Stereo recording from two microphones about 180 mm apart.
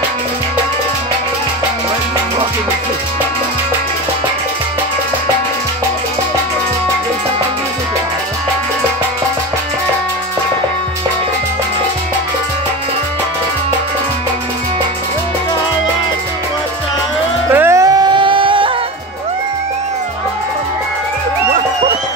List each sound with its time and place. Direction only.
17.5 s music: 15° right (ahead or behind); by 18.7 s 30° right (ahead or behind)